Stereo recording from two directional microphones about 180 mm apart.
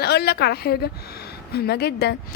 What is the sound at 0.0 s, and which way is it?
A woman's voice, 60° left (ahead or behind).